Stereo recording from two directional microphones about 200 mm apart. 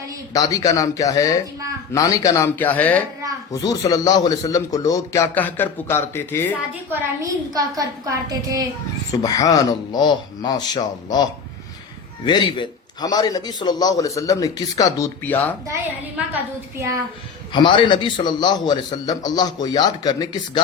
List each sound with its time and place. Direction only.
0.3 s speech: 15° left (ahead or behind)
3.5 s speech: 20° left (ahead or behind)
6.9 s a woman's voice: 15° right (ahead or behind)
9.2 s a man's voice: 20° left (ahead or behind)
16.3 s a woman's voice: 15° right (ahead or behind)
17.5 s a man's voice: 25° left (ahead or behind)